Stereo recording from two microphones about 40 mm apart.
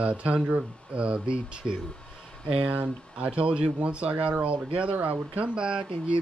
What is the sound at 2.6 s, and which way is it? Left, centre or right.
Speech, right.